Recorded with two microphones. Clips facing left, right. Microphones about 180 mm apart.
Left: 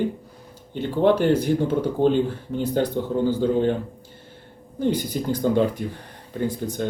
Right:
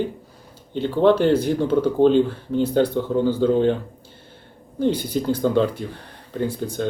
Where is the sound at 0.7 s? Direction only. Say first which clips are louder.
Right 2 dB; 15° left (ahead or behind).